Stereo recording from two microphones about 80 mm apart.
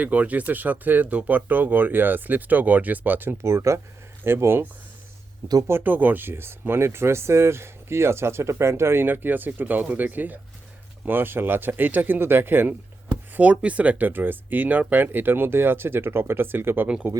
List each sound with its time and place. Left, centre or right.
0.0 s speech: centre